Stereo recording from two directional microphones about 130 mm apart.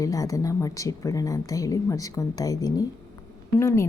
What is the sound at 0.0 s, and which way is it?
A woman's voice, 25° left (ahead or behind).